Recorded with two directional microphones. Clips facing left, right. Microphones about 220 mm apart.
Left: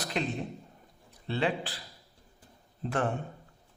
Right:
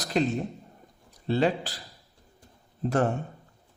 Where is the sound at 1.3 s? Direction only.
40° right (ahead or behind).